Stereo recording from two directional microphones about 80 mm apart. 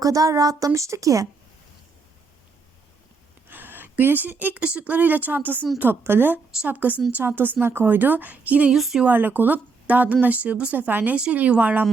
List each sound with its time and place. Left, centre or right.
0.0 s a woman's voice: right
3.5 s a woman's voice: right
8.7 s speech: centre
9.0 s speech: right